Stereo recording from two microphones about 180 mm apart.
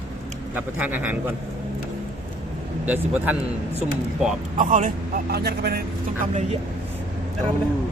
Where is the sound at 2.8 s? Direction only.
10° right (ahead or behind).